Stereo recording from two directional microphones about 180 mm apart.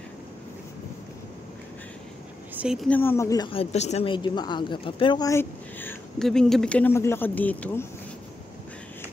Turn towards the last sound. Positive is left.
turn(degrees=10)  # may be behind; listen again after turning